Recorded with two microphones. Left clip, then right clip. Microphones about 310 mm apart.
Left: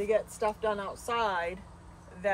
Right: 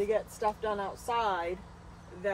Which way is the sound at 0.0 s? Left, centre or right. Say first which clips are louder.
Left 1 dB; left.